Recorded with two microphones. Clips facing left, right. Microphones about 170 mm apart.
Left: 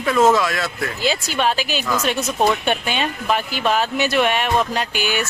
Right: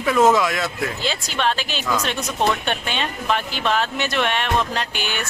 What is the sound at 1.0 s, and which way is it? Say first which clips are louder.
Speech: left 4 dB; 10° left (ahead or behind).